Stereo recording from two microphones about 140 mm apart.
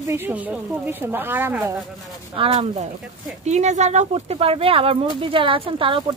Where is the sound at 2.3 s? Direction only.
45° right (ahead or behind).